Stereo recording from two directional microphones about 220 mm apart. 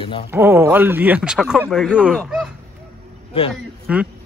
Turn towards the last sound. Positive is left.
turn(degrees=-5)  # may be behind; listen again after turning